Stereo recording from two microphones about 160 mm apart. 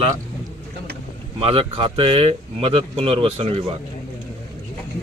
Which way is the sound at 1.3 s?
35° right (ahead or behind).